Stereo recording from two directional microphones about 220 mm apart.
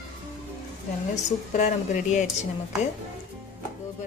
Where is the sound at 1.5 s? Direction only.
35° left (ahead or behind).